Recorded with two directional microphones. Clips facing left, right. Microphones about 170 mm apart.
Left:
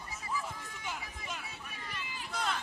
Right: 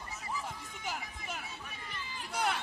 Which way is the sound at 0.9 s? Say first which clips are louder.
Right 1 dB; 50° right (ahead or behind).